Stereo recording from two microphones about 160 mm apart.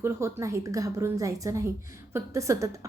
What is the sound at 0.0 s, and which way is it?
A woman's voice, 15° right (ahead or behind).